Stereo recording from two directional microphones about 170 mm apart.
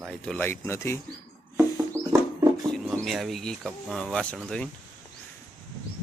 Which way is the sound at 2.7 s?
5° left (ahead or behind).